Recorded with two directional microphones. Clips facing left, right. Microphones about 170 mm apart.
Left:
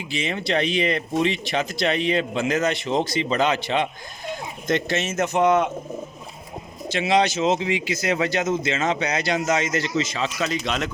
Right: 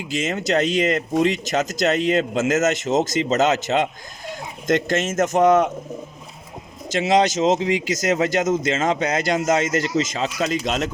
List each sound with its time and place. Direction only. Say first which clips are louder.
0.1 s speech: right 3 dB; 45° right (ahead or behind)
6.8 s speech: right 2 dB; 45° right (ahead or behind)